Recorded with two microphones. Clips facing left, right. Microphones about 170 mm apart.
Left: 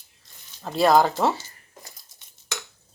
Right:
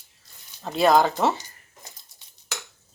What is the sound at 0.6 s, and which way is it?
Speech, centre (ahead or behind).